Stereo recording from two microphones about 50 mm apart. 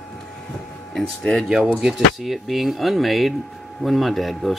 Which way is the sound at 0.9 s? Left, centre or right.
Centre.